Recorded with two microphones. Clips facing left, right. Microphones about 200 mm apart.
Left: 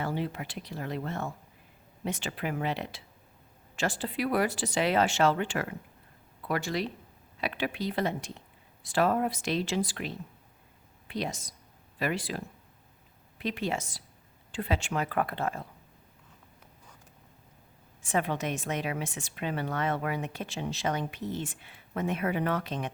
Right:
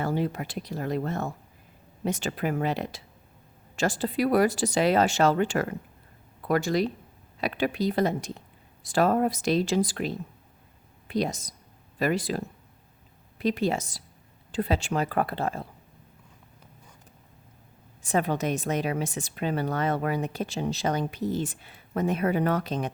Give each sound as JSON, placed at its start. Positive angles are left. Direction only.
{"t": 0.0, "sound": "a woman's voice", "side_deg": -45}
{"t": 13.4, "sound": "a woman's voice", "side_deg": -40}
{"t": 18.0, "sound": "a woman's voice", "side_deg": -40}